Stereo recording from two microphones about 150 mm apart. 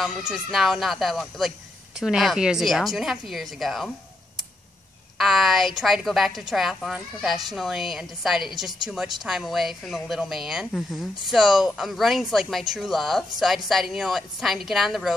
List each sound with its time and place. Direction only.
0.0 s a woman's voice: centre (ahead or behind)
5.1 s a woman's voice: centre (ahead or behind)